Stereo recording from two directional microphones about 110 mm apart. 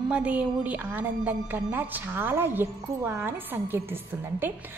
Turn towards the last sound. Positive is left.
turn(degrees=-20)  # may be behind; listen again after turning